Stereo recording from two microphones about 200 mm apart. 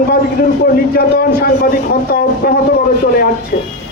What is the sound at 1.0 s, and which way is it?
A man's voice, 50° left (ahead or behind).